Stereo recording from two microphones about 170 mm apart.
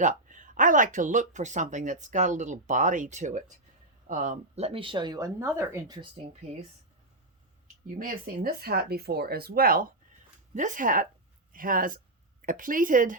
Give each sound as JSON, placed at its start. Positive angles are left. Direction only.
{"t": 0.0, "sound": "speech", "side_deg": -50}
{"t": 7.9, "sound": "speech", "side_deg": -55}